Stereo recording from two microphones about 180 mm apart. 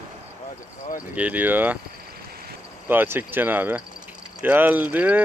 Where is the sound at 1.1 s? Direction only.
10° right (ahead or behind).